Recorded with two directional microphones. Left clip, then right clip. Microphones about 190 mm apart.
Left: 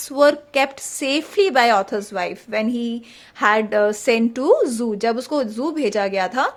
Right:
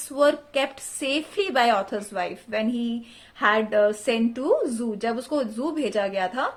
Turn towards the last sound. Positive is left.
turn(degrees=35)  # may be behind; listen again after turning